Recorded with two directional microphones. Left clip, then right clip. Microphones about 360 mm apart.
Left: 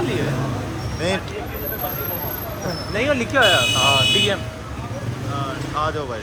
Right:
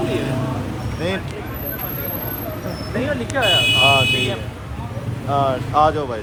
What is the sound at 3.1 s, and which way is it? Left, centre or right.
Speech, left.